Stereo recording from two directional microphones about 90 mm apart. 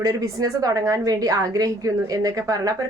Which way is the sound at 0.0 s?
40° right (ahead or behind).